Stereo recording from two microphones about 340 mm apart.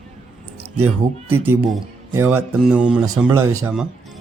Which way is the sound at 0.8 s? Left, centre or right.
Right.